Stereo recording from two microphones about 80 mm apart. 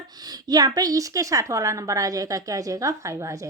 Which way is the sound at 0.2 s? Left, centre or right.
Right.